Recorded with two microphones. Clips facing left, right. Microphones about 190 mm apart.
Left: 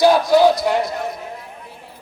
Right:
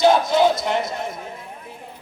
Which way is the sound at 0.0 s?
25° right (ahead or behind).